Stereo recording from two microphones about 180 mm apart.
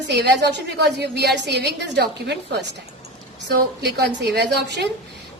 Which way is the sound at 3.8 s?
65° right (ahead or behind).